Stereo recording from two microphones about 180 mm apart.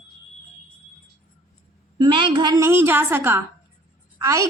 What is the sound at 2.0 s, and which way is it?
A woman's voice, 25° right (ahead or behind).